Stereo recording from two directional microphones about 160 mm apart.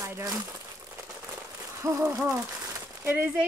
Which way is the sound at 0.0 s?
20° right (ahead or behind).